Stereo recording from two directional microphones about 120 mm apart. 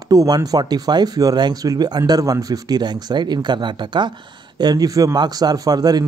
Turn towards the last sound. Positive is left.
turn(degrees=-35)  # may be behind; listen again after turning